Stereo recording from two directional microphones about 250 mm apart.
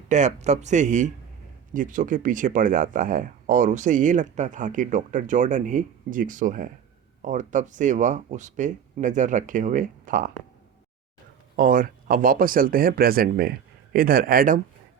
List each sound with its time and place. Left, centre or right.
0.1 s speech: right
11.5 s speech: right